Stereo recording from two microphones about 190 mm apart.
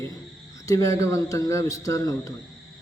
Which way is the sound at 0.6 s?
15° left (ahead or behind).